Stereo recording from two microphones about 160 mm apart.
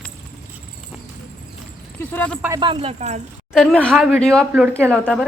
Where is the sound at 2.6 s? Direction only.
35° right (ahead or behind).